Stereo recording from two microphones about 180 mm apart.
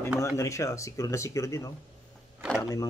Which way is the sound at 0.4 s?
15° left (ahead or behind).